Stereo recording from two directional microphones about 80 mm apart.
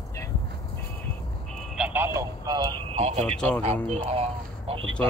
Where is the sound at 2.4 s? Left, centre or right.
Right.